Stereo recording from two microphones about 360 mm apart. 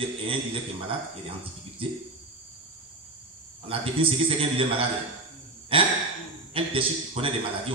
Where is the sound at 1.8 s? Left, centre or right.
Centre.